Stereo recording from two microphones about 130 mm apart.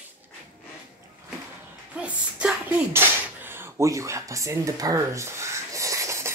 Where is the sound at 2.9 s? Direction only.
15° right (ahead or behind).